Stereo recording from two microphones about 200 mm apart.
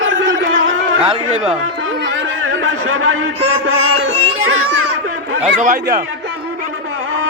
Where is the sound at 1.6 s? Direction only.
70° right (ahead or behind); by 2.8 s 90° right.